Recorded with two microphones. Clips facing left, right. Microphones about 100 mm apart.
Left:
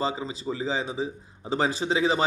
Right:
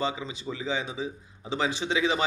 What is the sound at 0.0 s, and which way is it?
Speech, 35° left (ahead or behind).